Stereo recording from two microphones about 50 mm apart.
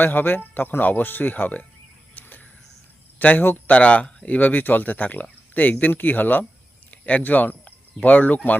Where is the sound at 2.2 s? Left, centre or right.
Left.